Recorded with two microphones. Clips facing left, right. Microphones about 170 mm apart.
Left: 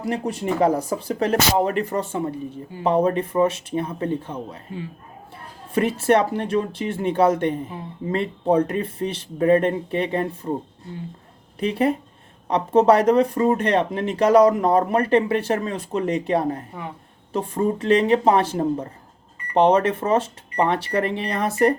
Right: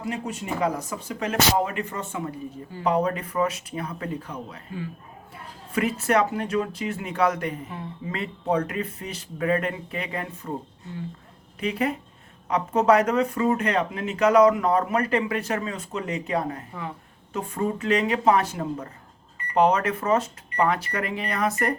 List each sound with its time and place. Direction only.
0.3 s speech: 35° left (ahead or behind)
11.6 s speech: 30° left (ahead or behind)